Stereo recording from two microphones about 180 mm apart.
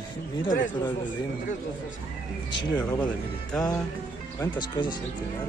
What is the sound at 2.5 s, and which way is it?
Speech, 25° left (ahead or behind).